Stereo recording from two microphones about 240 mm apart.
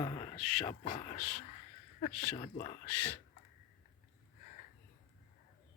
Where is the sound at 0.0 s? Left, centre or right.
Left.